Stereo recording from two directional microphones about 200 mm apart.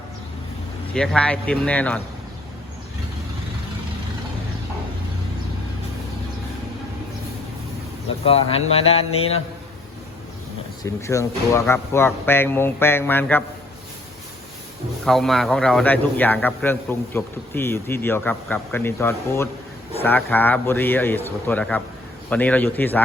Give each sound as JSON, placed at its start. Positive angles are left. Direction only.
{"t": 0.9, "sound": "a man's voice", "side_deg": 5}
{"t": 8.2, "sound": "speech", "side_deg": 30}
{"t": 10.8, "sound": "a man's voice", "side_deg": 15}
{"t": 15.0, "sound": "a man's voice", "side_deg": 0}